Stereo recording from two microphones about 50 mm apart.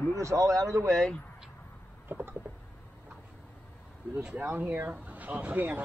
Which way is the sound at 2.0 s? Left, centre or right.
Right.